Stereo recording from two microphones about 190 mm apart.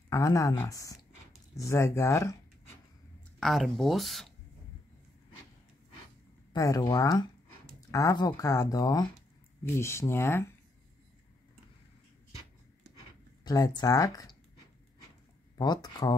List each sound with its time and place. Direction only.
0.1 s speech: 15° left (ahead or behind)
3.3 s speech: centre (ahead or behind)
6.5 s speech: 20° left (ahead or behind)
13.4 s speech: 20° left (ahead or behind)
15.5 s speech: 20° left (ahead or behind)